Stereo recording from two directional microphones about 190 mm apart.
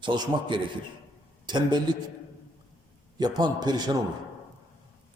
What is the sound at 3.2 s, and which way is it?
Speech, 20° right (ahead or behind).